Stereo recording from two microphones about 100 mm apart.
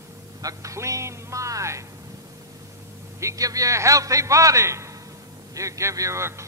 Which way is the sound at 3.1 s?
30° right (ahead or behind).